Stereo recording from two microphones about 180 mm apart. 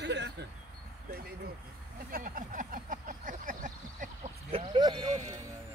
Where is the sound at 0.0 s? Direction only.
75° right (ahead or behind).